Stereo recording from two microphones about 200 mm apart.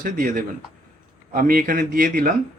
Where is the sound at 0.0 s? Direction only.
40° right (ahead or behind).